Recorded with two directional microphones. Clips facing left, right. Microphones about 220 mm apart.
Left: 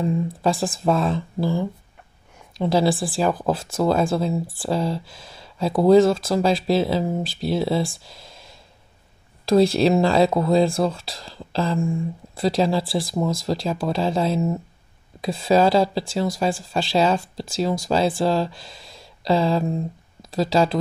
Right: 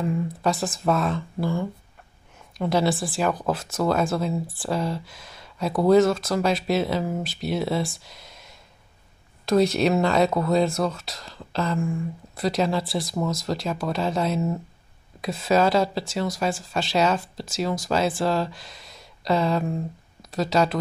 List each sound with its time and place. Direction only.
0.1 s speech: 30° left (ahead or behind)